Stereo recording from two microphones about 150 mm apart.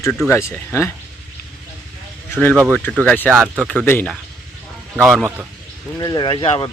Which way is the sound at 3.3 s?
5° right (ahead or behind).